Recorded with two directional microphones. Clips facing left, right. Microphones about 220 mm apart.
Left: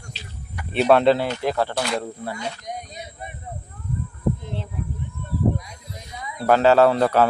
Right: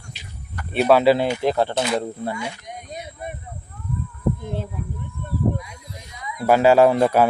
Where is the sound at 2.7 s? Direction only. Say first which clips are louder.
Left 4 dB; 35° left (ahead or behind).